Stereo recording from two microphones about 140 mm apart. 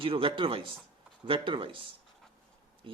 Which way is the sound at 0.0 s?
40° right (ahead or behind).